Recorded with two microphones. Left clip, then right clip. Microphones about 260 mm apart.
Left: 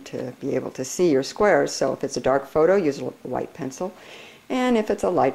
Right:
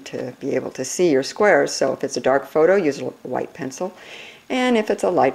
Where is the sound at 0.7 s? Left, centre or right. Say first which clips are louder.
Right 2 dB; centre.